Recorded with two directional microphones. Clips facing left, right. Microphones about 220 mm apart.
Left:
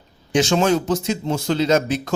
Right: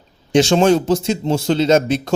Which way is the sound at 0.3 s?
30° right (ahead or behind).